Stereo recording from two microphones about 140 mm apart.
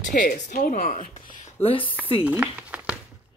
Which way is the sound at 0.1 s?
65° left (ahead or behind).